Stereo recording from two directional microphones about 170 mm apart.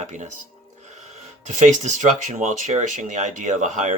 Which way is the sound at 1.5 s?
45° right (ahead or behind).